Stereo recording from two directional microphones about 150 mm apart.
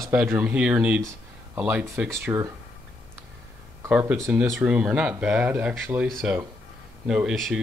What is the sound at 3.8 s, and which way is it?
Speech, 5° right (ahead or behind).